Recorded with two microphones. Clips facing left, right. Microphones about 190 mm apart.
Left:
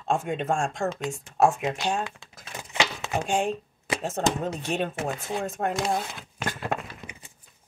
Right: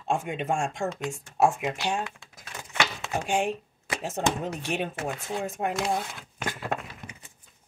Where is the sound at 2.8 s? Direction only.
15° left (ahead or behind).